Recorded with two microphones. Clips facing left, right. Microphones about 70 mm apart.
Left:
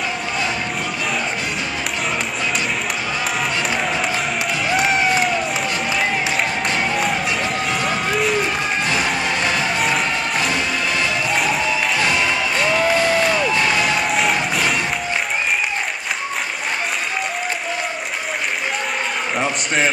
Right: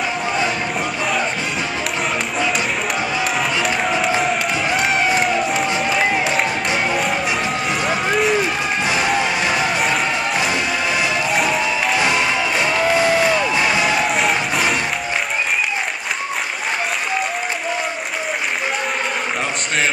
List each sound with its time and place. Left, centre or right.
4.7 s crowd: centre
7.8 s a sound: centre
8.9 s music: centre
11.3 s music: centre
12.0 s music: centre
12.6 s a sound: centre